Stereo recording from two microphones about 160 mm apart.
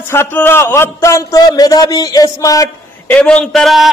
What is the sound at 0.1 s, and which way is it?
A man's voice, 15° left (ahead or behind).